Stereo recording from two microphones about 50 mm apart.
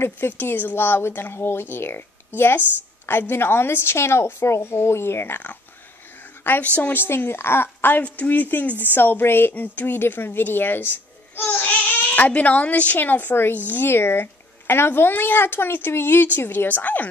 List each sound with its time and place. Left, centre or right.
0.4 s speech: left
6.6 s speech: left
7.0 s speech: left
8.0 s speech: left
11.4 s speech: left